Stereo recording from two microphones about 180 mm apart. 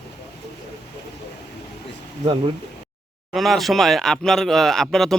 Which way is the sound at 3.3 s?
Centre (ahead or behind).